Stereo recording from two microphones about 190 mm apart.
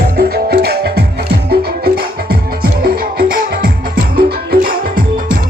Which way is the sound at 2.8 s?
50° right (ahead or behind).